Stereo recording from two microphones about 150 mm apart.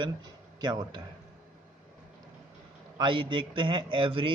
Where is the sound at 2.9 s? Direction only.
30° right (ahead or behind).